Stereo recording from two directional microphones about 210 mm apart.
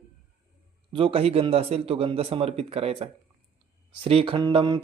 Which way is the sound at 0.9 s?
25° right (ahead or behind).